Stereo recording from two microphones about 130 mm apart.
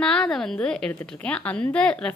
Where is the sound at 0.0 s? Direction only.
5° left (ahead or behind).